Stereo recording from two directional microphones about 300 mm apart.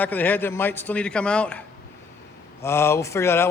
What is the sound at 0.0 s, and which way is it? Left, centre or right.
A man's voice, centre.